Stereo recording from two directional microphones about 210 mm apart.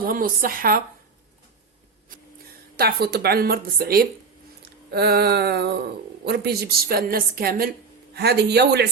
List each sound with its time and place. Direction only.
0.0 s speech: 45° right (ahead or behind)
2.7 s a woman's voice: 50° right (ahead or behind)
4.6 s a sound: 50° right (ahead or behind)
6.2 s a woman's voice: 50° right (ahead or behind)